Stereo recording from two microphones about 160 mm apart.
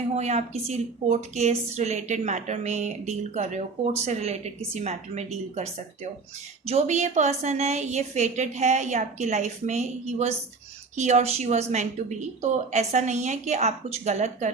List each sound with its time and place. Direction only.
0.2 s a woman's voice: 45° right (ahead or behind)